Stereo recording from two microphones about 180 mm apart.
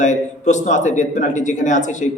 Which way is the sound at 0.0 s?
40° left (ahead or behind).